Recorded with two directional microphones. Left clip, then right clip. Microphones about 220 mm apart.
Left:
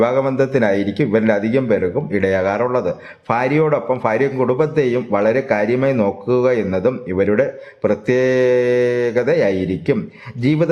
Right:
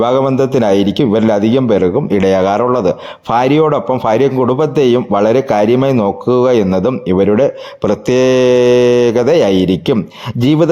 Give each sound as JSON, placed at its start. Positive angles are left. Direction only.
{"t": 0.0, "sound": "a man's voice", "side_deg": -25}
{"t": 7.9, "sound": "mantra", "side_deg": -30}